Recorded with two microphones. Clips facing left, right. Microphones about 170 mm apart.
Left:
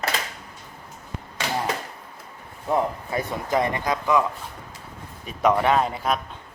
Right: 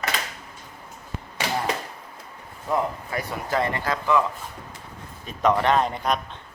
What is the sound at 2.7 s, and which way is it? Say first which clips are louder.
Speech: left 2 dB; 20° left (ahead or behind).